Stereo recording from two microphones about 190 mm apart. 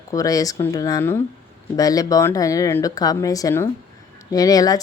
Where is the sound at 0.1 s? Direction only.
20° left (ahead or behind).